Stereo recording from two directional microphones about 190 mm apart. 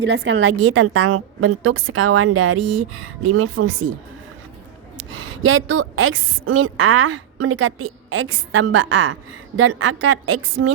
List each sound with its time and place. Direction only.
0.0 s a woman's voice: 70° right (ahead or behind); by 3.6 s 90° right
5.5 s a woman's voice: 90° right